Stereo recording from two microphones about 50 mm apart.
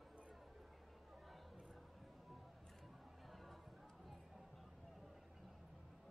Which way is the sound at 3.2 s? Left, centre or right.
Centre.